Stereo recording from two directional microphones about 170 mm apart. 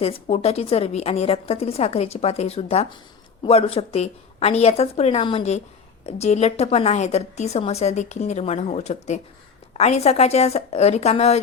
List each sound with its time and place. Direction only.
0.0 s a woman's voice: 40° left (ahead or behind)